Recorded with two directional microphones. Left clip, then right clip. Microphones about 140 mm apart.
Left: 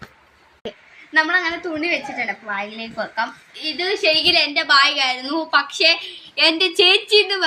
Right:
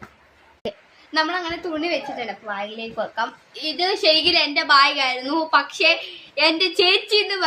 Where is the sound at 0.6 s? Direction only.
25° right (ahead or behind).